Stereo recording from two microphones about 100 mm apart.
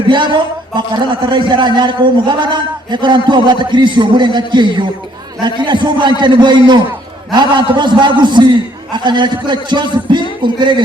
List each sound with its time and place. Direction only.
0.1 s a man's voice: 50° right (ahead or behind)